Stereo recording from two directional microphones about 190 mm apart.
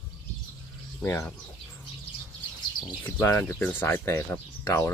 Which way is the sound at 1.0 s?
10° left (ahead or behind).